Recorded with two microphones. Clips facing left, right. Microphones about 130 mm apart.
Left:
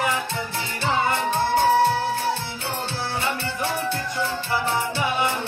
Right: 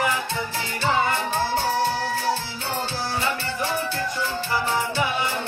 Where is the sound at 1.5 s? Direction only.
55° left (ahead or behind).